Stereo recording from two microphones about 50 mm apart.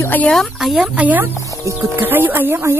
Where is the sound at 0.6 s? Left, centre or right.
Centre.